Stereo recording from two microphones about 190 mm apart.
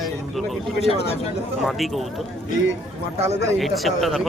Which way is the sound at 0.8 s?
35° left (ahead or behind).